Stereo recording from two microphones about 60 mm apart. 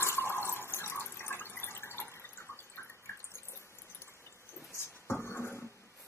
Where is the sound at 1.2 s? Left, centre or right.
Left.